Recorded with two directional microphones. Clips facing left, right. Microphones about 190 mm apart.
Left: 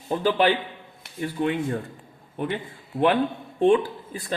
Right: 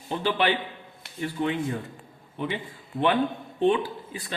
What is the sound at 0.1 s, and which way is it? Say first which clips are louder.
A man's voice: left 4 dB; 40° left (ahead or behind).